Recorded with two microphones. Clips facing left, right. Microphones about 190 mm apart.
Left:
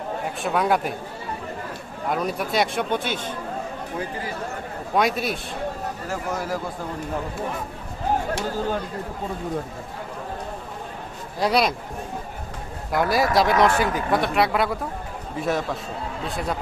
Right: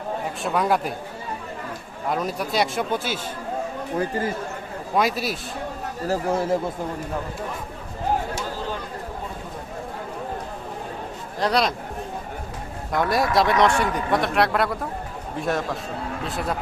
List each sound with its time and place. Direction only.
0.4 s speech: centre (ahead or behind)
2.0 s speech: centre (ahead or behind)
4.9 s speech: centre (ahead or behind)
6.1 s speech: 30° right (ahead or behind)
11.3 s a man's voice: 10° left (ahead or behind)
12.9 s speech: centre (ahead or behind)